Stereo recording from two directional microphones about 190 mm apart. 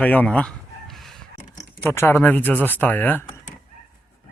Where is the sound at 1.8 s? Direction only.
15° left (ahead or behind).